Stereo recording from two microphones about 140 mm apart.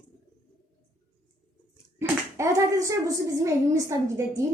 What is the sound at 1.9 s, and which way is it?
A child's voice, 20° right (ahead or behind).